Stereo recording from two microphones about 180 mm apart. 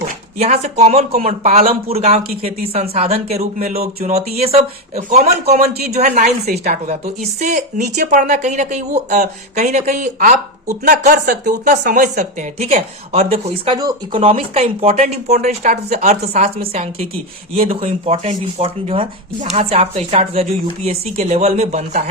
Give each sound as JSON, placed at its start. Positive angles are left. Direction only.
{"t": 0.3, "sound": "speech", "side_deg": -35}
{"t": 1.3, "sound": "speech", "side_deg": -50}
{"t": 1.6, "sound": "speech", "side_deg": -35}
{"t": 2.1, "sound": "speech", "side_deg": -55}
{"t": 2.7, "sound": "speech", "side_deg": -35}
{"t": 5.5, "sound": "speech", "side_deg": -60}
{"t": 5.9, "sound": "speech", "side_deg": -40}
{"t": 13.7, "sound": "speech", "side_deg": -20}
{"t": 14.2, "sound": "speech", "side_deg": -35}